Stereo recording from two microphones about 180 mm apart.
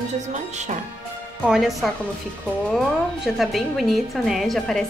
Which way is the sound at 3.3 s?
Centre (ahead or behind).